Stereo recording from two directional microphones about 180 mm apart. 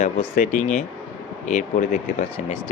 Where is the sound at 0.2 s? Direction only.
40° left (ahead or behind).